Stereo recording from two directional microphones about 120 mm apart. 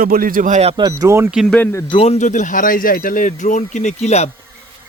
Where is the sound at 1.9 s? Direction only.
55° left (ahead or behind).